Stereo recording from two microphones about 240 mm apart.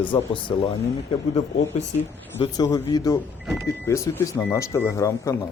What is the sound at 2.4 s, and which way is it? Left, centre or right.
Speech, centre.